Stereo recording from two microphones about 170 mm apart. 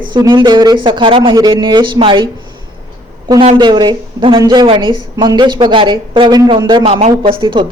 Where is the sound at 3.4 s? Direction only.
30° right (ahead or behind).